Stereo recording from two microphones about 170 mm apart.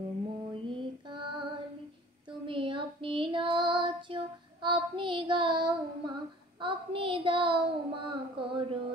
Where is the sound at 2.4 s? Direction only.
30° right (ahead or behind).